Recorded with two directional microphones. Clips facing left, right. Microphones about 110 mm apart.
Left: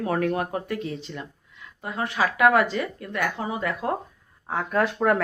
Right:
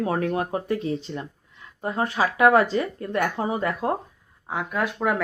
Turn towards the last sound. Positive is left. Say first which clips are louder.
# left 3 dB
turn(degrees=-5)  # may be behind; listen again after turning